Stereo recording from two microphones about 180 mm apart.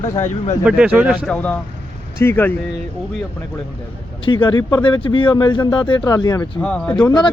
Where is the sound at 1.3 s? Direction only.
10° left (ahead or behind).